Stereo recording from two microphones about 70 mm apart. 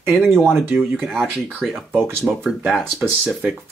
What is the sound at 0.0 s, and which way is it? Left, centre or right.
Speech, right.